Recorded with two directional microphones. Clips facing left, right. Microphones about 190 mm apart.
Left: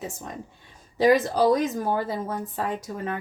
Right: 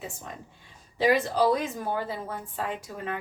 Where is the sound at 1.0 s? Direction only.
40° left (ahead or behind).